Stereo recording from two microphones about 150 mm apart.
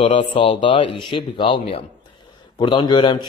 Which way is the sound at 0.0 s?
35° left (ahead or behind).